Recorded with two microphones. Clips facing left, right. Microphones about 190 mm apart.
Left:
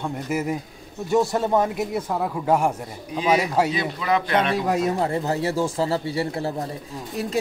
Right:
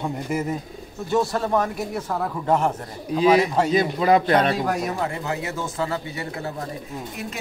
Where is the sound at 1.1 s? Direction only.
20° left (ahead or behind).